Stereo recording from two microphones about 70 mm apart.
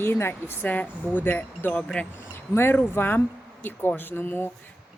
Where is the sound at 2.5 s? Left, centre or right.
Left.